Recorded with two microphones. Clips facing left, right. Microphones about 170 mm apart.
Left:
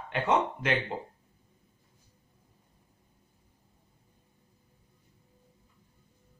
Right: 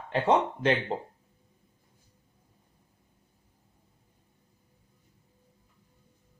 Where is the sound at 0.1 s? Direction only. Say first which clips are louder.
Right 3 dB; 30° right (ahead or behind).